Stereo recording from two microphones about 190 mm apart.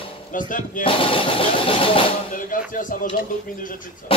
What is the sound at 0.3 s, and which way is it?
Music, 45° left (ahead or behind).